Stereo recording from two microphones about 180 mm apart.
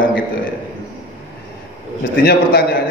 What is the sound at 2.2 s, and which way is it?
Speech, 60° left (ahead or behind).